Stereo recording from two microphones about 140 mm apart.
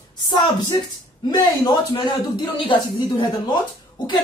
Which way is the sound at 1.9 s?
35° left (ahead or behind).